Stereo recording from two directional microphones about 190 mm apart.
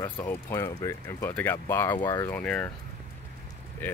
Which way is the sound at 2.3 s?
5° left (ahead or behind).